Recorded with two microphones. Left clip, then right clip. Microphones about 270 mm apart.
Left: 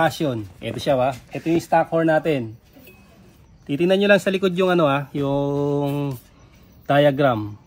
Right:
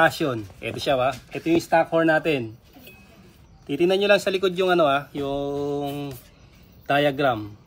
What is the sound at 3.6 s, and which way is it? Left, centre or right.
Speech, left.